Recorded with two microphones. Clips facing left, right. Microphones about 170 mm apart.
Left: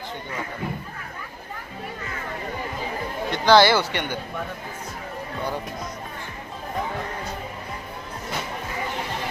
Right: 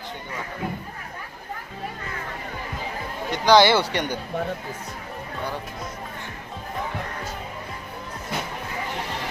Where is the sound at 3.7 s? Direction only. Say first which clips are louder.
Right 1 dB; 35° right (ahead or behind).